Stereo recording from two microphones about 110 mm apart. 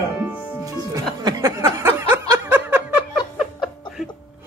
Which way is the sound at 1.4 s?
25° right (ahead or behind).